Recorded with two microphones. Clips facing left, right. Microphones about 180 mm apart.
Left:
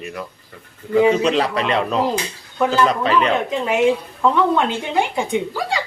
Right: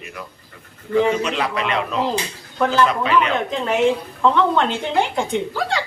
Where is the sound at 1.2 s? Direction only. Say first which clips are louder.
Left 4 dB; 35° left (ahead or behind).